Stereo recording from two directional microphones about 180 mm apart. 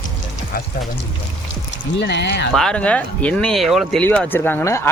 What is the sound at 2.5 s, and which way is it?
Speech, 5° left (ahead or behind).